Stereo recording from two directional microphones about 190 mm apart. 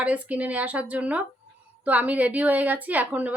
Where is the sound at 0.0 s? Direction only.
5° right (ahead or behind).